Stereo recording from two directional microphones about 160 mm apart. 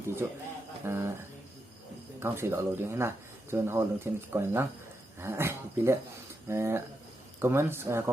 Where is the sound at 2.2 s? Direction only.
15° right (ahead or behind).